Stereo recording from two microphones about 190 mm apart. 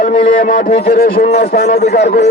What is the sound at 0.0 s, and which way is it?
Speech, 35° left (ahead or behind).